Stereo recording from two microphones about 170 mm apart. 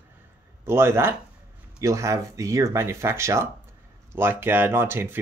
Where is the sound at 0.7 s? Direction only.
15° right (ahead or behind).